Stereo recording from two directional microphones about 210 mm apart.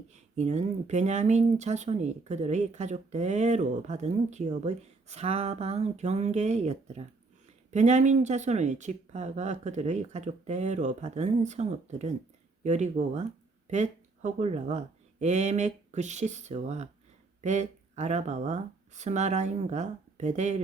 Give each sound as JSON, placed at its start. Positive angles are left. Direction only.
{"t": 0.1, "sound": "speech", "side_deg": -35}